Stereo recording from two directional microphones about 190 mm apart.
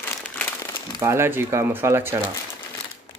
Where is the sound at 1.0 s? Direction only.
15° right (ahead or behind).